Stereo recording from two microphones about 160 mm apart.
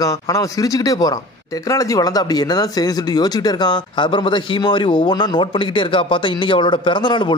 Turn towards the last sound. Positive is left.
turn(degrees=30)  # may be behind; listen again after turning